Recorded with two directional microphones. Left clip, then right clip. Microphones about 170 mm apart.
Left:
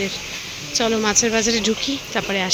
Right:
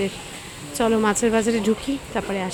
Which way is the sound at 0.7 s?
15° right (ahead or behind).